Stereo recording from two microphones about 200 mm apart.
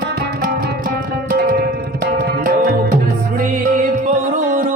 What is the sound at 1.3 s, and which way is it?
Tabla, 45° right (ahead or behind).